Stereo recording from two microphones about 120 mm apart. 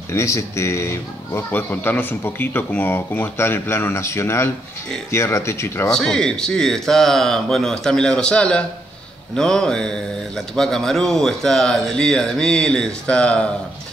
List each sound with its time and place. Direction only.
0.1 s a man's voice: 25° left (ahead or behind)
5.9 s speech: 5° left (ahead or behind)